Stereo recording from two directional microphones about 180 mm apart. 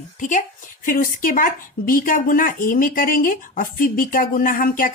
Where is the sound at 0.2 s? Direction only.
45° left (ahead or behind).